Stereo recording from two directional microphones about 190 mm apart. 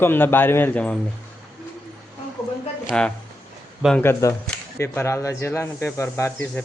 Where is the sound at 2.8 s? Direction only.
5° left (ahead or behind).